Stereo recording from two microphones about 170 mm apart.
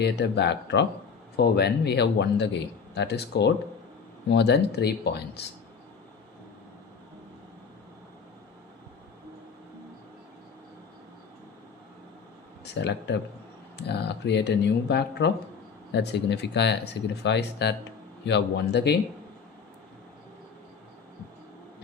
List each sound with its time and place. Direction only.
0.0 s speech: 85° left
1.4 s speech: 75° left (ahead or behind)
12.6 s speech: 90° left
13.7 s speech: 80° left
15.9 s speech: 85° left